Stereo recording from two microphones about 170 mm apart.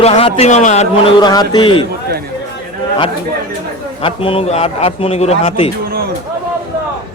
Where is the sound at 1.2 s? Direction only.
25° left (ahead or behind).